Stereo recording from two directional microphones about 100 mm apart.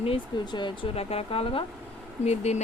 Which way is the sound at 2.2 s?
90° left.